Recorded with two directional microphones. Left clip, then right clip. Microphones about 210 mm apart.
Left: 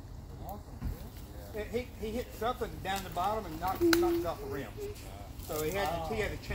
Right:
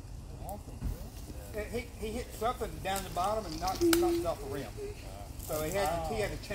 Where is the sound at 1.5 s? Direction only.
15° right (ahead or behind).